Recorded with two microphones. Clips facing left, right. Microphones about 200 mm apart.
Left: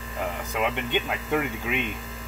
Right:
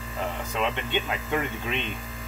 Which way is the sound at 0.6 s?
10° left (ahead or behind).